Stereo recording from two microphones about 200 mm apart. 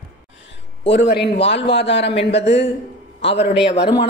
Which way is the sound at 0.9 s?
60° left (ahead or behind).